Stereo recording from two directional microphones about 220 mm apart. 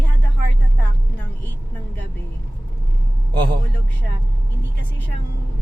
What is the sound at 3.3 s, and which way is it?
Speech, 20° right (ahead or behind).